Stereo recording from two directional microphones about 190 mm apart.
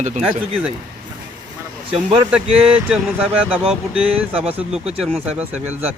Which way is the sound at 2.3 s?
5° right (ahead or behind).